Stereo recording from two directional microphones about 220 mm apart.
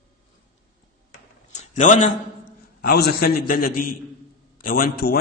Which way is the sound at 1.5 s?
35° left (ahead or behind).